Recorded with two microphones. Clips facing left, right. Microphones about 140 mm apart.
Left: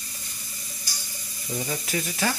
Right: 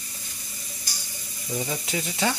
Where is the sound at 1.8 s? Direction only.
20° right (ahead or behind).